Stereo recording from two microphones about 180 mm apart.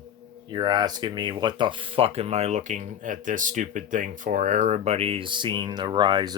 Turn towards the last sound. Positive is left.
turn(degrees=-25)  # may be behind; listen again after turning